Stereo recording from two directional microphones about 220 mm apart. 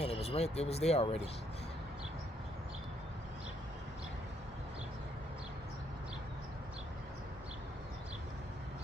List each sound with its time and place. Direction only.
0.0 s speech: 25° left (ahead or behind)